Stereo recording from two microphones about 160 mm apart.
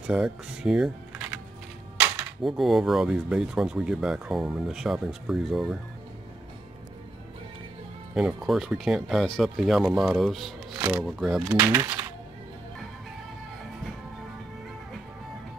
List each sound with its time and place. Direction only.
0.0 s speech: 5° right (ahead or behind)
8.1 s speech: 5° right (ahead or behind)
11.4 s speech: 15° right (ahead or behind)